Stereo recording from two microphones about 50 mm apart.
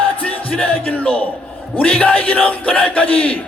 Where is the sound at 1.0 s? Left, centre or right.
Left.